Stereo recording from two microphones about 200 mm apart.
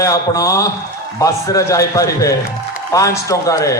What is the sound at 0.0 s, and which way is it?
A man's voice, 15° left (ahead or behind).